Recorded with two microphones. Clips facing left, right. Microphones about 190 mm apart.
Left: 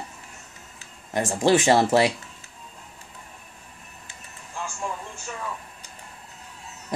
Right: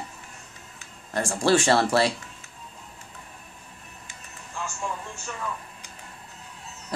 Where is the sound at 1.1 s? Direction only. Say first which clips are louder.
Left 2 dB; 15° left (ahead or behind).